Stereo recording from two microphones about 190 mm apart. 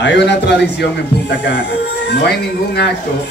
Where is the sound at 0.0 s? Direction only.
65° left (ahead or behind).